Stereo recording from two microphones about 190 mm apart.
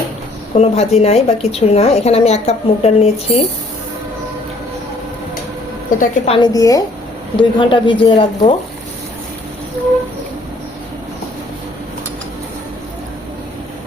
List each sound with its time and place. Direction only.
0.5 s a woman's voice: 35° left (ahead or behind)
6.0 s speech: 30° left (ahead or behind)